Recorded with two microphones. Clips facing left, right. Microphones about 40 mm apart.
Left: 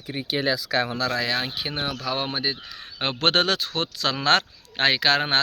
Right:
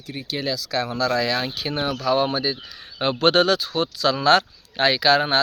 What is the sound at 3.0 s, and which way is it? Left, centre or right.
Speech, left.